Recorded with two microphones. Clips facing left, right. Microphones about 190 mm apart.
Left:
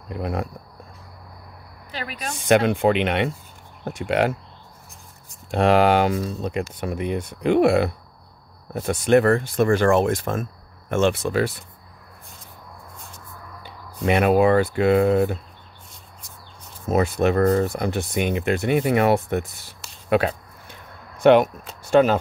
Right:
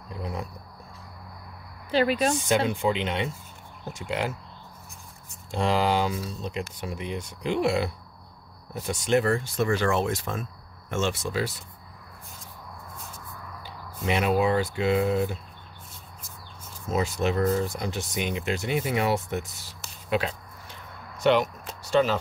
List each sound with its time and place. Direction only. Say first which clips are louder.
0.1 s speech: left 7 dB; 60° left (ahead or behind)
1.9 s speech: right 10 dB; 30° right (ahead or behind)
2.4 s speech: left 6 dB; 60° left (ahead or behind)
5.5 s speech: left 7 dB; 60° left (ahead or behind)
14.0 s speech: left 6 dB; 55° left (ahead or behind)
16.2 s a sound: even; centre (ahead or behind)
16.8 s speech: left 6 dB; 60° left (ahead or behind)